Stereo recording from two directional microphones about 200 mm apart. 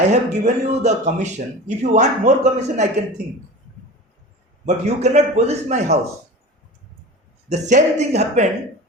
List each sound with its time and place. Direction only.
0.1 s speech: 35° right (ahead or behind)
4.6 s speech: 35° right (ahead or behind)
7.5 s speech: 35° right (ahead or behind)